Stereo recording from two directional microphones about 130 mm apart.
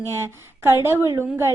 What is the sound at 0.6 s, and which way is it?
Speech, 20° right (ahead or behind).